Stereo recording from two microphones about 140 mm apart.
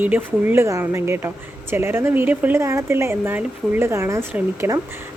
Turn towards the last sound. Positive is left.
turn(degrees=-20)  # may be behind; listen again after turning